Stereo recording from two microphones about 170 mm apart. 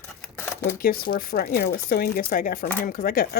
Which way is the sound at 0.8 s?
60° left (ahead or behind).